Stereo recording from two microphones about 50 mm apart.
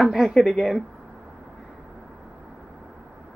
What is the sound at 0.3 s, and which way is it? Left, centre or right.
Speech, centre.